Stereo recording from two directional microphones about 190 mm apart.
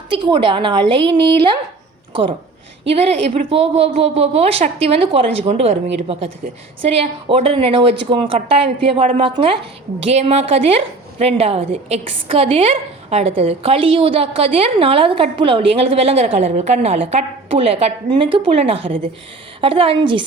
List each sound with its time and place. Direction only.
0.1 s a woman's voice: 25° right (ahead or behind)
2.9 s a woman's voice: 30° right (ahead or behind)